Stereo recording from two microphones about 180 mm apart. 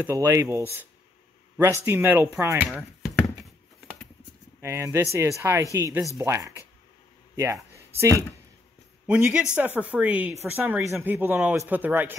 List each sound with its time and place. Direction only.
0.0 s speech: 15° right (ahead or behind)
2.6 s speech: centre (ahead or behind)
4.6 s speech: 15° right (ahead or behind)